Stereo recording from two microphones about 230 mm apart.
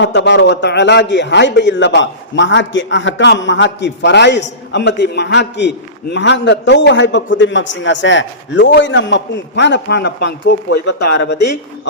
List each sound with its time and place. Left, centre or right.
0.0 s a man's voice: left